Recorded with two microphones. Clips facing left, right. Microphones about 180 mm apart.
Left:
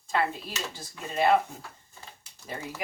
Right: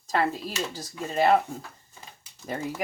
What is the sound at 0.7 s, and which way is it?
Speech, 40° right (ahead or behind).